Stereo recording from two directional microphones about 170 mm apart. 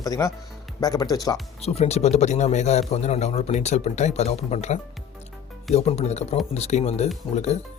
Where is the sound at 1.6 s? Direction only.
40° left (ahead or behind).